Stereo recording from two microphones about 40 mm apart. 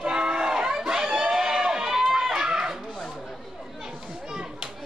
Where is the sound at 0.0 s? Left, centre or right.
Right.